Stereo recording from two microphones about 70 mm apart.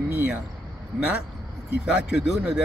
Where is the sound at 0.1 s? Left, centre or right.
Right.